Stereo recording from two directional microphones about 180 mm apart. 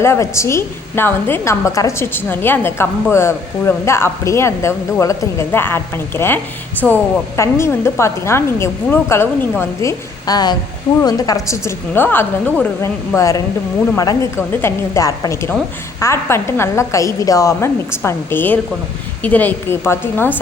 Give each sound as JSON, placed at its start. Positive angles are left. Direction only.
{"t": 0.0, "sound": "a woman's voice", "side_deg": 15}